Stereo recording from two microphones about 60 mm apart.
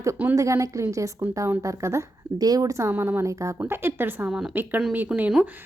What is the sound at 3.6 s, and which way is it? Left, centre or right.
Speech, right.